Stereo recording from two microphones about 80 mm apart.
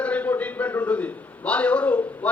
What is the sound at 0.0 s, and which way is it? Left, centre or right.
A man's voice, centre.